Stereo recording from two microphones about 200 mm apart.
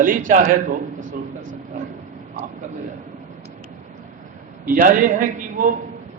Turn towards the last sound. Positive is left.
turn(degrees=-40)  # may be behind; listen again after turning